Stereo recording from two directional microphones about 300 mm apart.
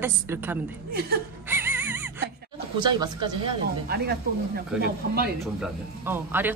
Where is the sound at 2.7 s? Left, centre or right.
Centre.